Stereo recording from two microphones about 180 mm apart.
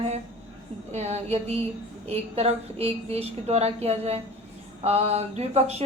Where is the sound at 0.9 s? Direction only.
35° right (ahead or behind).